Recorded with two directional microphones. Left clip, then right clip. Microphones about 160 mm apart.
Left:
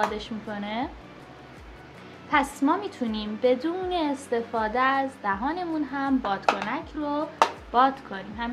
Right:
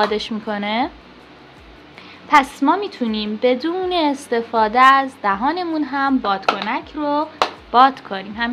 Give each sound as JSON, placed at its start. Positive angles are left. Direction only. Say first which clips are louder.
{"t": 0.0, "sound": "speech", "louder": "right 9 dB", "side_deg": -60}
{"t": 2.2, "sound": "a woman's voice", "louder": "right 9 dB", "side_deg": -50}